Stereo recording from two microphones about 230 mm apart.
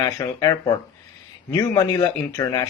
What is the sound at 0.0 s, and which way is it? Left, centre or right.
Speech, centre.